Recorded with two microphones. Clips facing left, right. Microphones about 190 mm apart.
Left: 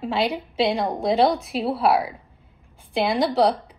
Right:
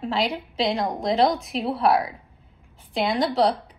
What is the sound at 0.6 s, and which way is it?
Speech, 30° left (ahead or behind).